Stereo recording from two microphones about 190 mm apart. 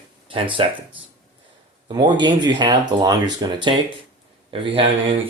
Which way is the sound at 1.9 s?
25° right (ahead or behind).